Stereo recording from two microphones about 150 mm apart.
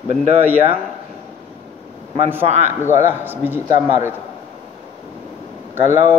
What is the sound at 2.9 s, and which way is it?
Speech, 15° right (ahead or behind).